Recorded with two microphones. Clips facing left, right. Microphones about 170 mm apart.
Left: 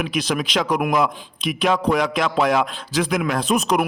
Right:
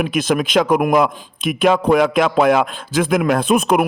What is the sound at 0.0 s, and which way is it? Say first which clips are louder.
A man's voice: right 5 dB; 50° right (ahead or behind).